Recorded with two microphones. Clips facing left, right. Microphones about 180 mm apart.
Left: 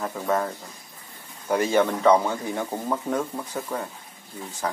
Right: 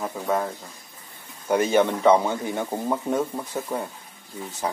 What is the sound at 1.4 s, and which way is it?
Speech, 20° right (ahead or behind).